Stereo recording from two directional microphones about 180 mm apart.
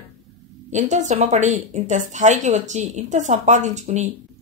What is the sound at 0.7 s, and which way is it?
A woman's voice, 40° right (ahead or behind).